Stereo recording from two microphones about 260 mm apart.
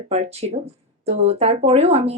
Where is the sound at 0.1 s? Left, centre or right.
Right.